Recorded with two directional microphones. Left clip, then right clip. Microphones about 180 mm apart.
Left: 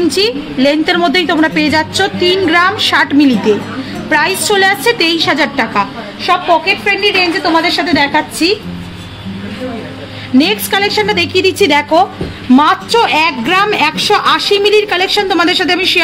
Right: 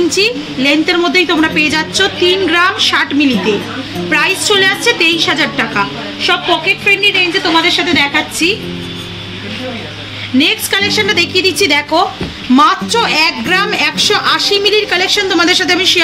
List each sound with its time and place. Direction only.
0.1 s a woman's voice: 75° left (ahead or behind)
10.4 s a woman's voice: 75° left (ahead or behind); by 16.0 s 55° left (ahead or behind)